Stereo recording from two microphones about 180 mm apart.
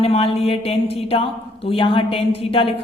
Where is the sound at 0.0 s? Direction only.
35° left (ahead or behind).